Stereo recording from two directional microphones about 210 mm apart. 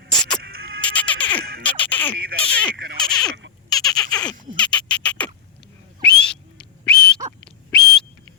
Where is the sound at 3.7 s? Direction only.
20° left (ahead or behind).